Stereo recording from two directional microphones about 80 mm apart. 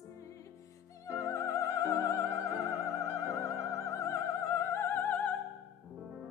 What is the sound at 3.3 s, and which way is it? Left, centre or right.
Music, left.